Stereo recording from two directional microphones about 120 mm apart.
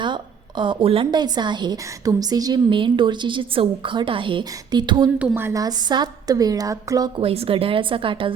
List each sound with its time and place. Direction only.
0.0 s a woman's voice: 40° right (ahead or behind)
5.2 s a woman's voice: 20° right (ahead or behind)
5.6 s a woman's voice: 35° right (ahead or behind)
7.2 s a woman's voice: 55° right (ahead or behind)